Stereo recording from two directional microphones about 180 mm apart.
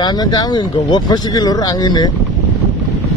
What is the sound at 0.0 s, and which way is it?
Speech, 25° left (ahead or behind).